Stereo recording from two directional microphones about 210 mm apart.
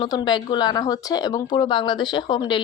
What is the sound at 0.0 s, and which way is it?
Speech, 20° left (ahead or behind).